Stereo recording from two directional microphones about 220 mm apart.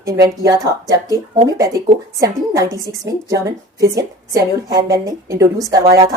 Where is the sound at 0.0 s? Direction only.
15° right (ahead or behind).